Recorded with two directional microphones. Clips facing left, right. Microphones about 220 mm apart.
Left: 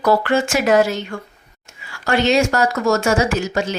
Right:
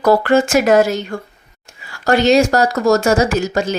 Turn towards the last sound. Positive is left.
turn(degrees=-40)  # may be behind; listen again after turning